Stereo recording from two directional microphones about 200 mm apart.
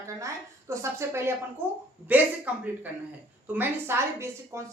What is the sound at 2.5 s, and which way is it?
A woman's voice, 5° right (ahead or behind).